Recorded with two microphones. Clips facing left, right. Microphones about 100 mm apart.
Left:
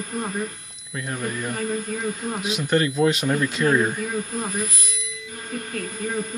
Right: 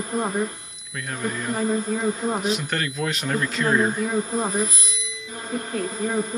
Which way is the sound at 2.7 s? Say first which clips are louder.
Left 7 dB; 15° left (ahead or behind).